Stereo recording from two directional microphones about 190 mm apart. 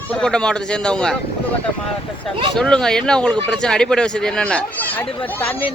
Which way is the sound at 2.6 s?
5° left (ahead or behind).